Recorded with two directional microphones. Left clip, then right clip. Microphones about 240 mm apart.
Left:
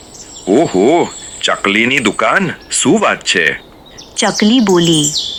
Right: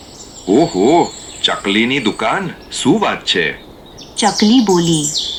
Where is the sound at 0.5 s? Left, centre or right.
Left.